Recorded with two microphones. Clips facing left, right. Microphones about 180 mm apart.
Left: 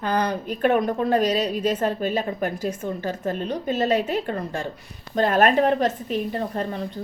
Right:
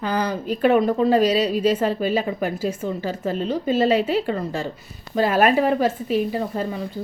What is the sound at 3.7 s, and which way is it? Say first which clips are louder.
Speech: right 3 dB; 10° right (ahead or behind).